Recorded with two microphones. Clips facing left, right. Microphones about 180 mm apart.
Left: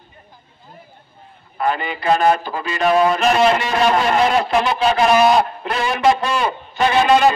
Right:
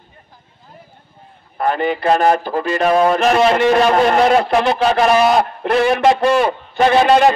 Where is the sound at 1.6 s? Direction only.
50° right (ahead or behind).